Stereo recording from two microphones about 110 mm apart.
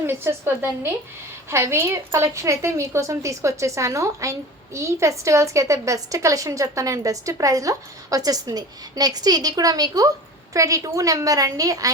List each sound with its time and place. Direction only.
0.0 s a woman's voice: 20° right (ahead or behind)